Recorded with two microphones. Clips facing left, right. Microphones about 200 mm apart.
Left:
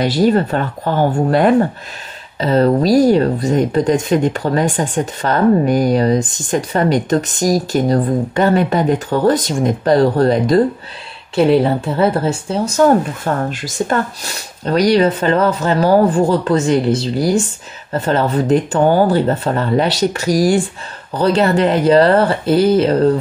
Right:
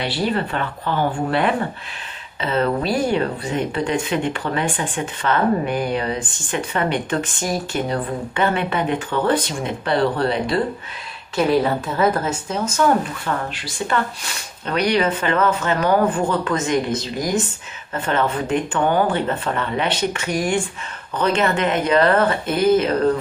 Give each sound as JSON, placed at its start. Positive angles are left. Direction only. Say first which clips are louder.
{"t": 0.0, "sound": "speech", "louder": "left 9 dB", "side_deg": 40}
{"t": 11.3, "sound": "speech", "louder": "left 5 dB", "side_deg": 30}